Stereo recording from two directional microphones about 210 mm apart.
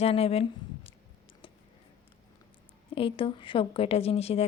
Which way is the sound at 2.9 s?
25° left (ahead or behind).